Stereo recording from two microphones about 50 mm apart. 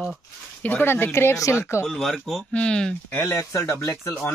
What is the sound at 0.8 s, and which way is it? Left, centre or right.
Speech, left.